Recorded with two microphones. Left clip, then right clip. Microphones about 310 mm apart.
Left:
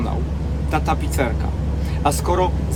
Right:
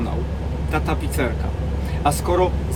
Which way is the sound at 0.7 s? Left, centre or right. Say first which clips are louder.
Left 2 dB; centre.